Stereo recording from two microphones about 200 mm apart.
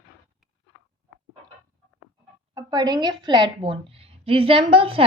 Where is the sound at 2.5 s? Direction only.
20° right (ahead or behind).